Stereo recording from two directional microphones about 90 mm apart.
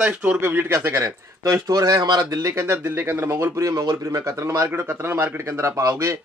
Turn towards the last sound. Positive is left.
turn(degrees=-35)  # may be behind; listen again after turning